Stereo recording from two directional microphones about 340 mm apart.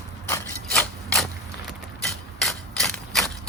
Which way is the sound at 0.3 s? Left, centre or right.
Centre.